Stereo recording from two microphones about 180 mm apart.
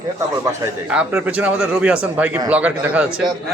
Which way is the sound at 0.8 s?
5° right (ahead or behind).